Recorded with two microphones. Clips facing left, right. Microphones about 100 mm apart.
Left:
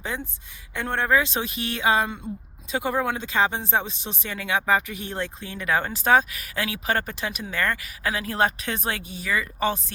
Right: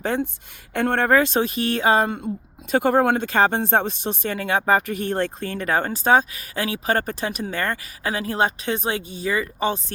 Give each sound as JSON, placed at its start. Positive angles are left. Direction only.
{"t": 0.0, "sound": "speech", "side_deg": -60}
{"t": 2.7, "sound": "speech", "side_deg": -60}
{"t": 5.6, "sound": "speech", "side_deg": -35}